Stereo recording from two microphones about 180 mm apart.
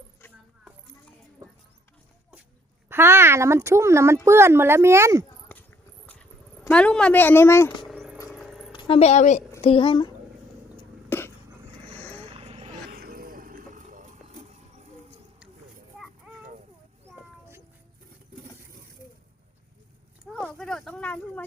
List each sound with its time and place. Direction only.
2.9 s speech: 15° right (ahead or behind)
6.7 s speech: 5° left (ahead or behind)
7.9 s a sound: 5° right (ahead or behind)
8.7 s a woman's voice: 30° left (ahead or behind)
11.1 s a sound: 10° left (ahead or behind)
11.9 s vehicle: 10° left (ahead or behind)
12.3 s vehicle: 35° right (ahead or behind)
12.9 s vehicle: 55° right (ahead or behind)
20.3 s a sound: 5° left (ahead or behind)